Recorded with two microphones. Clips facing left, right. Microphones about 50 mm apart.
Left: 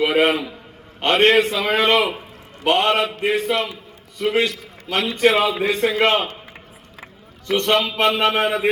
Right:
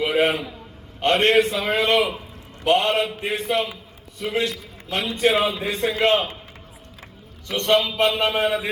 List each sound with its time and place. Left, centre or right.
0.0 s a man's voice: left
0.9 s a man's voice: left
5.6 s a man's voice: left
7.6 s a man's voice: left